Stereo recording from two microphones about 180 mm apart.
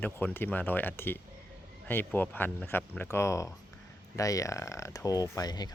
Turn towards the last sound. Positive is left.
turn(degrees=20)  # may be behind; listen again after turning